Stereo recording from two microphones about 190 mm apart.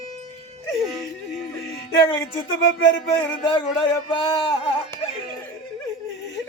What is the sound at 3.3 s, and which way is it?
Speech, 25° left (ahead or behind).